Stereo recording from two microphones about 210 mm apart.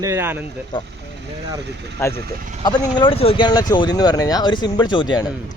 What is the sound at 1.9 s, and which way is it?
Speech, 10° left (ahead or behind).